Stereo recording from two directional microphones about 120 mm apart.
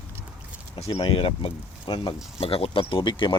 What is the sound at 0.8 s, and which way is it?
Speech, 55° left (ahead or behind).